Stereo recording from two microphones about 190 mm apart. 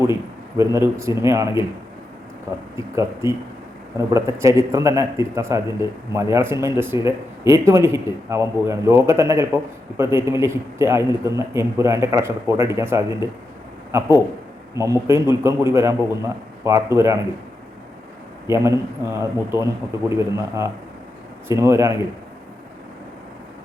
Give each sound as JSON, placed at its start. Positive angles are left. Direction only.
{"t": 0.0, "sound": "a man's voice", "side_deg": -15}
{"t": 2.7, "sound": "a man's voice", "side_deg": -15}
{"t": 14.8, "sound": "a man's voice", "side_deg": -15}
{"t": 18.4, "sound": "a man's voice", "side_deg": -15}